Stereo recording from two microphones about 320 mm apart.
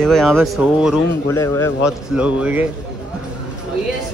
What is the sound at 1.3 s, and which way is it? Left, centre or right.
Speech, centre.